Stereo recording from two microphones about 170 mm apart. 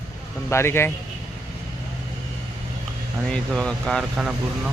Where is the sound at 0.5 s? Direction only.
15° left (ahead or behind).